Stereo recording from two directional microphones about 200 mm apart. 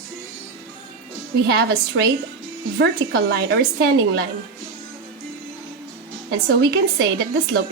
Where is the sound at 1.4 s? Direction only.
55° right (ahead or behind).